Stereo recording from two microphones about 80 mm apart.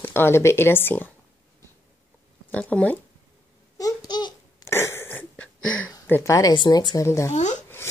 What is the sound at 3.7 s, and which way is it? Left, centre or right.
Babbling, left.